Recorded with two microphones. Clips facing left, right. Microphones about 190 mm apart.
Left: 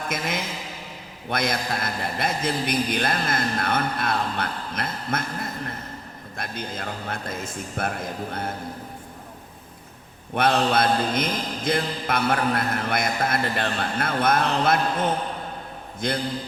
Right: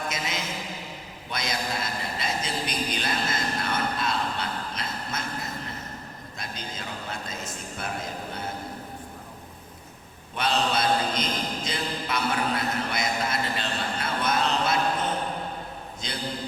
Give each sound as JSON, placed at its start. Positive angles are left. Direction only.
{"t": 0.1, "sound": "mantra", "side_deg": 55}
{"t": 6.3, "sound": "mantra", "side_deg": 55}
{"t": 10.3, "sound": "mantra", "side_deg": 55}
{"t": 16.0, "sound": "mantra", "side_deg": 55}